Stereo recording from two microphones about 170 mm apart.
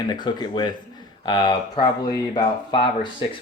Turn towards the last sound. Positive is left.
turn(degrees=30)  # may be behind; listen again after turning